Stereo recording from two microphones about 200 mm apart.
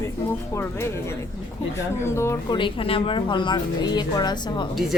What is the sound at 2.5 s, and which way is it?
Speech, 25° left (ahead or behind).